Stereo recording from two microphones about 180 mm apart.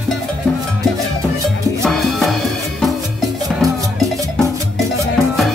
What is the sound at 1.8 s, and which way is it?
Music, centre (ahead or behind).